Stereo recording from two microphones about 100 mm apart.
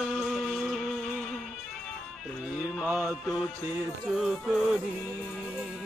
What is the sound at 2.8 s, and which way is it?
Music, 20° right (ahead or behind).